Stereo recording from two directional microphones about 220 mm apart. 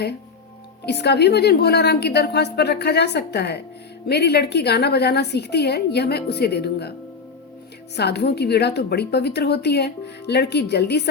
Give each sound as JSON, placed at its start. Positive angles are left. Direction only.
{"t": 0.9, "sound": "a woman's voice", "side_deg": 50}
{"t": 7.9, "sound": "a woman's voice", "side_deg": 50}